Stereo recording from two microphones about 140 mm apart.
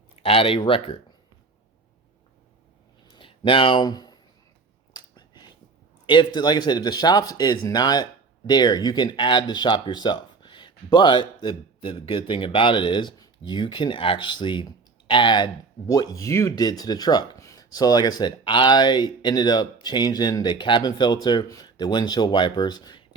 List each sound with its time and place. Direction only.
0.2 s speech: 40° left (ahead or behind)
3.2 s speech: 40° left (ahead or behind)
4.9 s a sound: 30° left (ahead or behind)
6.1 s speech: 35° left (ahead or behind)